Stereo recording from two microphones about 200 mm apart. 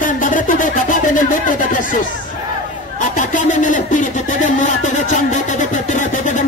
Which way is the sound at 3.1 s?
40° left (ahead or behind).